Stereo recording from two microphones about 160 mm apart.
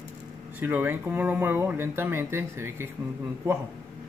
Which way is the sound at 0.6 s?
10° right (ahead or behind).